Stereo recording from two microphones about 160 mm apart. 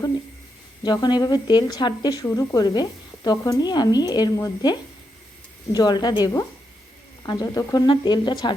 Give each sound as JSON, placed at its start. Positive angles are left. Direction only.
{"t": 0.8, "sound": "a woman's voice", "side_deg": 25}